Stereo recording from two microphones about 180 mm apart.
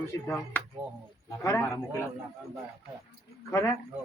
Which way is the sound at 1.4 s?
15° left (ahead or behind).